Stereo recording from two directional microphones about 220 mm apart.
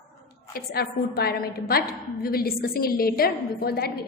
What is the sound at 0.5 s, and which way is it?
A woman's voice, 45° left (ahead or behind).